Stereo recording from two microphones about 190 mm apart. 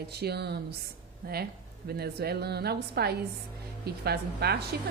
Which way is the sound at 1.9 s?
55° right (ahead or behind).